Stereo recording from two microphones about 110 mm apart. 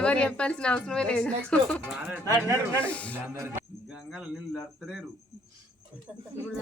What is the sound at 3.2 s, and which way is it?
Speech, 25° right (ahead or behind).